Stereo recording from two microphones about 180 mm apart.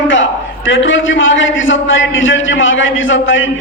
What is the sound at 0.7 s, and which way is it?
A man's voice, 90° left.